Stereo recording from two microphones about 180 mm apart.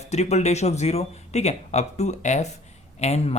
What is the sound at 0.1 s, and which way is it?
Speech, 40° left (ahead or behind).